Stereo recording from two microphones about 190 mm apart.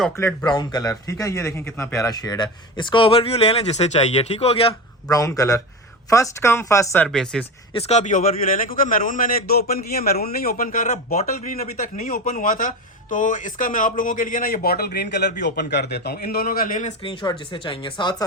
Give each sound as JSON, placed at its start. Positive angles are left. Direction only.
{"t": 0.2, "sound": "speech", "side_deg": 20}
{"t": 5.0, "sound": "speech", "side_deg": 20}
{"t": 7.7, "sound": "speech", "side_deg": 35}
{"t": 17.0, "sound": "speech", "side_deg": 25}